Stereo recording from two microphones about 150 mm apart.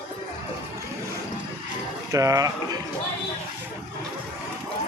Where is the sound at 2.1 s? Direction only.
20° right (ahead or behind).